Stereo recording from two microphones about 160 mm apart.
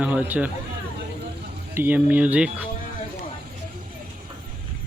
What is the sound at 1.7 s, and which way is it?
Speech, 10° right (ahead or behind).